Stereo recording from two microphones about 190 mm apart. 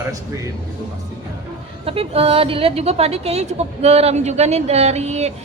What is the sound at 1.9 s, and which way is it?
A woman's voice, 30° right (ahead or behind).